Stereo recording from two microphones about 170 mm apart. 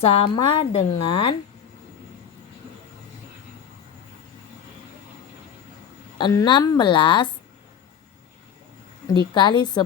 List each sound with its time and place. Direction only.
0.0 s a woman's voice: 35° left (ahead or behind)
6.1 s a woman's voice: 25° left (ahead or behind)
9.0 s a woman's voice: 25° left (ahead or behind)